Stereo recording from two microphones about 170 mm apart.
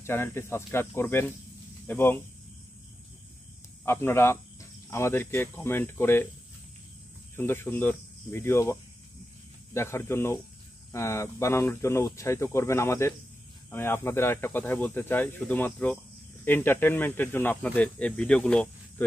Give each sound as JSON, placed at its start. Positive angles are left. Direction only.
{"t": 0.0, "sound": "speech", "side_deg": 15}
{"t": 3.8, "sound": "speech", "side_deg": 15}
{"t": 7.3, "sound": "speech", "side_deg": 15}
{"t": 9.8, "sound": "speech", "side_deg": 15}